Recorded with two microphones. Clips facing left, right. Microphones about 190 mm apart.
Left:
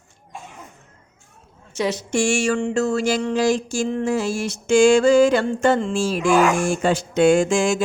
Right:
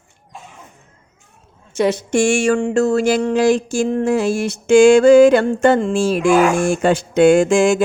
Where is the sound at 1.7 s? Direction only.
55° right (ahead or behind).